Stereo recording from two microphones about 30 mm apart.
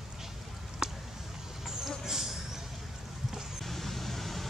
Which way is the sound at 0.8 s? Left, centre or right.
Right.